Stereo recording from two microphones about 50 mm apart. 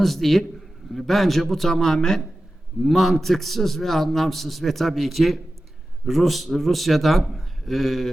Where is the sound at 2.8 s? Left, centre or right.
Centre.